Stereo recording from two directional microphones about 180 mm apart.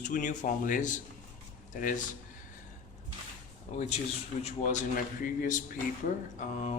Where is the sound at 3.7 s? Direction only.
40° left (ahead or behind).